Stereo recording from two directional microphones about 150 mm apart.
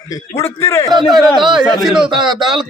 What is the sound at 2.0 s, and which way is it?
Speech, 30° right (ahead or behind).